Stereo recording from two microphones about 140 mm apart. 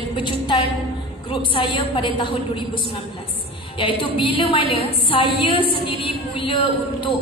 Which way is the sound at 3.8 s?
40° left (ahead or behind).